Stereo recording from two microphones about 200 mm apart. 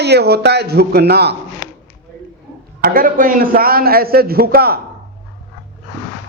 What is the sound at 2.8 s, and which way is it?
A man's voice, 45° right (ahead or behind).